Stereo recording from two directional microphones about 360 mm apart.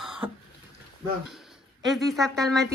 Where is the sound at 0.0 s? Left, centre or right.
Centre.